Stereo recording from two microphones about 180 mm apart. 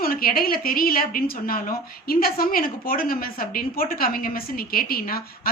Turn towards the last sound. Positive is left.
turn(degrees=55)  # may be behind; listen again after turning